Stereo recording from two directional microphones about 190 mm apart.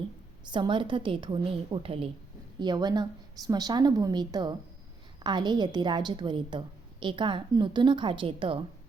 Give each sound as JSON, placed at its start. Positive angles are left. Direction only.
{"t": 0.4, "sound": "a woman's voice", "side_deg": -25}